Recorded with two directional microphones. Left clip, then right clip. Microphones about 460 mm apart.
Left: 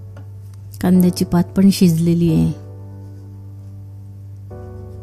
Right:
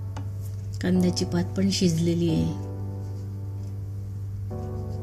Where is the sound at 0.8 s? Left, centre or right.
Left.